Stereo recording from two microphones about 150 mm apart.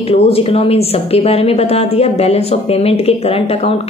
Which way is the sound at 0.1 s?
40° left (ahead or behind).